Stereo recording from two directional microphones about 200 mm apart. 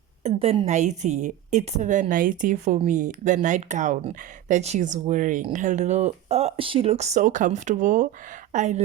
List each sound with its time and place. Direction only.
0.2 s a woman's voice: 30° right (ahead or behind)